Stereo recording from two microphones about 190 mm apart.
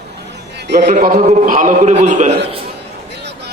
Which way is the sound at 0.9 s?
45° right (ahead or behind).